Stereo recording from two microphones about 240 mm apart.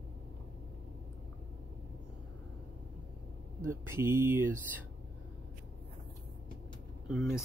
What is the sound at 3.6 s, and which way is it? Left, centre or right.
Speech, centre.